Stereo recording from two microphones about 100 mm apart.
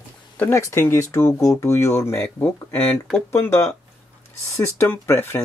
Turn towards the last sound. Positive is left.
turn(degrees=25)  # may be behind; listen again after turning